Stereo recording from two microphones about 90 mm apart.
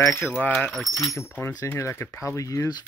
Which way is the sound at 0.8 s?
35° left (ahead or behind).